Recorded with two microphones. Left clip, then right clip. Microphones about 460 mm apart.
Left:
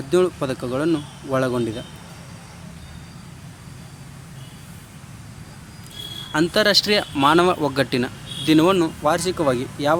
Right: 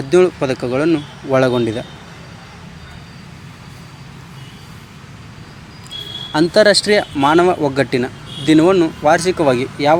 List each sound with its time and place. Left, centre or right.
0.1 s speech: left
6.3 s speech: left